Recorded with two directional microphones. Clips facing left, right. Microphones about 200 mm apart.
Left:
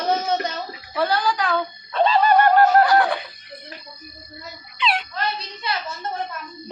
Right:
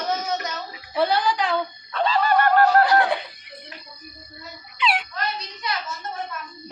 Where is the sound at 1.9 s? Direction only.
20° left (ahead or behind).